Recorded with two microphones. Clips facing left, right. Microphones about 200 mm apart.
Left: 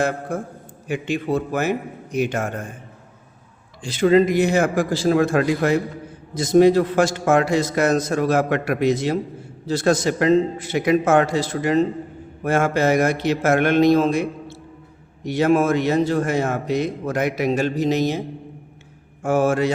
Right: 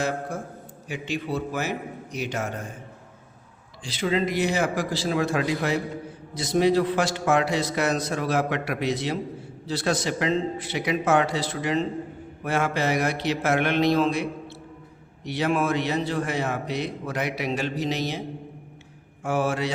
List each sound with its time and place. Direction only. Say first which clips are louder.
0.3 s a man's voice: left 6 dB; 55° left (ahead or behind)
3.8 s a man's voice: left 9 dB; 50° left (ahead or behind)
19.2 s a man's voice: left 7 dB; 45° left (ahead or behind)